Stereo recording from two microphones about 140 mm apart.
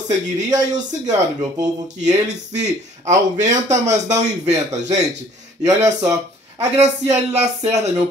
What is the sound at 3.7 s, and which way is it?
Speech, 55° right (ahead or behind).